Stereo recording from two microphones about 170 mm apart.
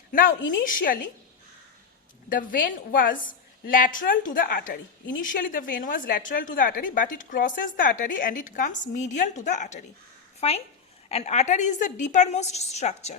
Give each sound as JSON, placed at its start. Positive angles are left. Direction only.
{"t": 0.1, "sound": "a woman's voice", "side_deg": 50}
{"t": 2.3, "sound": "a woman's voice", "side_deg": 55}